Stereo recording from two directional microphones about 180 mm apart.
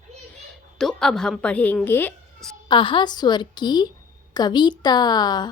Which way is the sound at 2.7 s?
30° left (ahead or behind).